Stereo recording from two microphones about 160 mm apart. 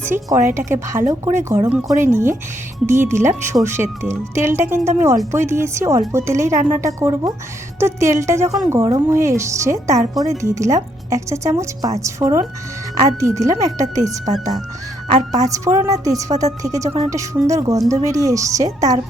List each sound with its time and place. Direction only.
0.3 s speech: 15° right (ahead or behind)